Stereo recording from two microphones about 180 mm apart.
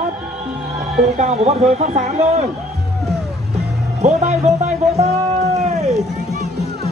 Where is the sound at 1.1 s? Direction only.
40° right (ahead or behind).